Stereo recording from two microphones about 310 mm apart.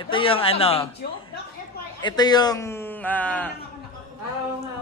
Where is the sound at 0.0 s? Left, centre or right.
Centre.